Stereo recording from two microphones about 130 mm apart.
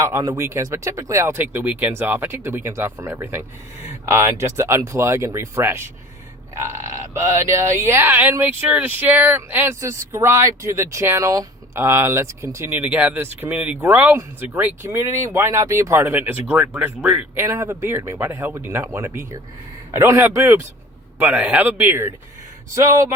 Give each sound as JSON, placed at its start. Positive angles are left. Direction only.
{"t": 0.0, "sound": "speech", "side_deg": -25}